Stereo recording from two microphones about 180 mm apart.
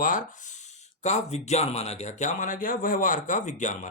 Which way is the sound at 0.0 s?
50° left (ahead or behind).